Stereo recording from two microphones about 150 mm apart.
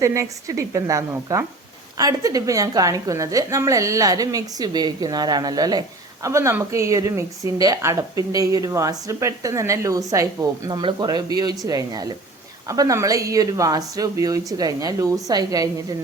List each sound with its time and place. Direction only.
0.0 s a woman's voice: 20° right (ahead or behind)